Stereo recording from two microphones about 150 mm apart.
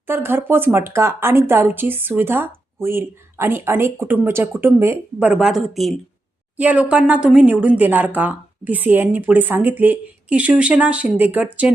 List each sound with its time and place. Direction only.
0.1 s speech: 15° right (ahead or behind)
5.3 s a woman's voice: 5° right (ahead or behind)